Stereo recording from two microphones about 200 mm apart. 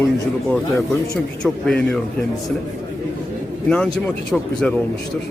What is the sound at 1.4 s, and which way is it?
Speech, 5° left (ahead or behind).